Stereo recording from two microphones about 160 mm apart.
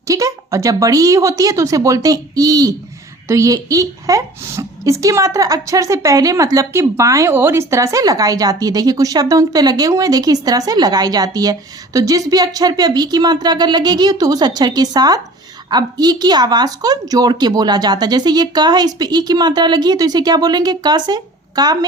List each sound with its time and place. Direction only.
0.1 s a woman's voice: 20° right (ahead or behind)